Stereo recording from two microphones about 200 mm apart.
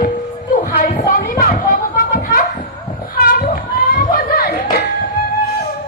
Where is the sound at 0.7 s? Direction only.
45° left (ahead or behind).